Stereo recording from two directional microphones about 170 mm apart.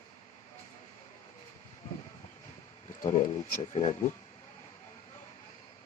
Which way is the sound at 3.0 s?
50° left (ahead or behind).